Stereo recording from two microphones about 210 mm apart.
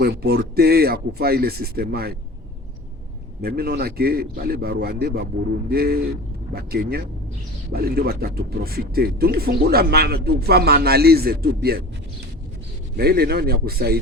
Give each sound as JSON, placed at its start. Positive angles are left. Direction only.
{"t": 0.0, "sound": "speech", "side_deg": -50}
{"t": 3.4, "sound": "speech", "side_deg": -50}
{"t": 13.0, "sound": "speech", "side_deg": -50}